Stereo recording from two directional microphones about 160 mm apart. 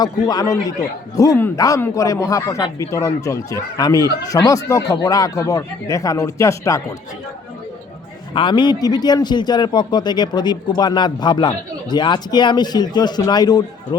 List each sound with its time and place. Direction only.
0.0 s a man's voice: 25° left (ahead or behind)
8.3 s a man's voice: 30° left (ahead or behind)